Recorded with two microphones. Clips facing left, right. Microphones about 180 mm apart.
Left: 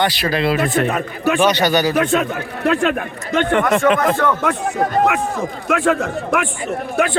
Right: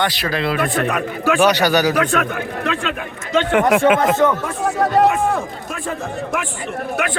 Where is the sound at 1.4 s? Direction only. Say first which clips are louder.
Right 1 dB; 10° right (ahead or behind).